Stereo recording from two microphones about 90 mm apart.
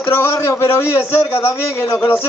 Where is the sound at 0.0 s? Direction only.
30° left (ahead or behind).